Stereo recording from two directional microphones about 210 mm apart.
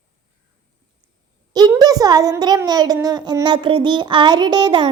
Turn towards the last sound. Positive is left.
turn(degrees=-20)  # may be behind; listen again after turning